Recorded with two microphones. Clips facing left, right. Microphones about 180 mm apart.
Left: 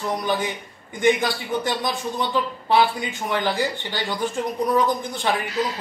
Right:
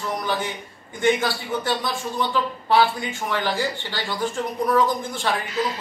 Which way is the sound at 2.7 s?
15° left (ahead or behind).